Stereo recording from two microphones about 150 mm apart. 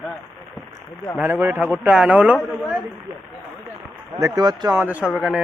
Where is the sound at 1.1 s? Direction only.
10° right (ahead or behind).